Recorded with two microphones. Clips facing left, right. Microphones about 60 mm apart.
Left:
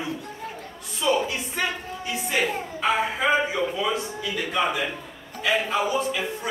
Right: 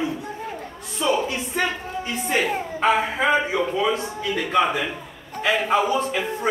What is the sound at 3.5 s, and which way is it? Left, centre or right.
A man's voice, right.